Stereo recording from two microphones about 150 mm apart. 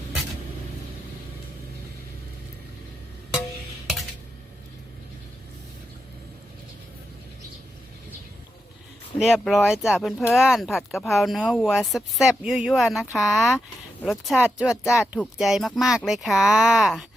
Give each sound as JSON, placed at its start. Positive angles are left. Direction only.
{"t": 9.1, "sound": "speech", "side_deg": -5}
{"t": 14.8, "sound": "speech", "side_deg": 20}
{"t": 15.4, "sound": "speech", "side_deg": 0}